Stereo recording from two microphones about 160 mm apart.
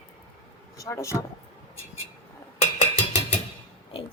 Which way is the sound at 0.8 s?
20° left (ahead or behind).